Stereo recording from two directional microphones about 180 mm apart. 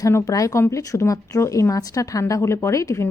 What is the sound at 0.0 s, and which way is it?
Speech, 15° left (ahead or behind).